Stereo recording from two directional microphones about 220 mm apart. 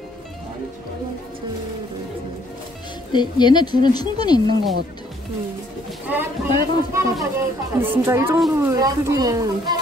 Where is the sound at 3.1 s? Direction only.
20° left (ahead or behind).